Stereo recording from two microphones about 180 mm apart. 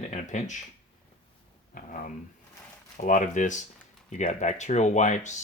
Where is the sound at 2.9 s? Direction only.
45° left (ahead or behind).